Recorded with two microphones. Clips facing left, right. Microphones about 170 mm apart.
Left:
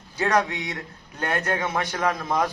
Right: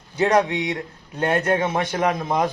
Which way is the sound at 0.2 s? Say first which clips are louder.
Right 4 dB; 25° right (ahead or behind).